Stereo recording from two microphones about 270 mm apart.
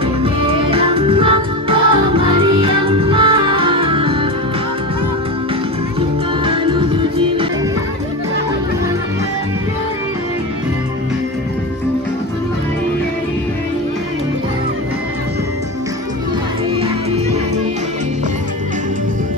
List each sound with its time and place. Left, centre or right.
0.2 s music: right
5.9 s music: centre